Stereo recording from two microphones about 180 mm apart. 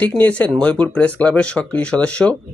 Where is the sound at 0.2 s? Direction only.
10° left (ahead or behind).